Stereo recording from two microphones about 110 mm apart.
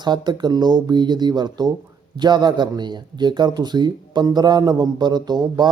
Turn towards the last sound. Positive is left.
turn(degrees=-40)  # may be behind; listen again after turning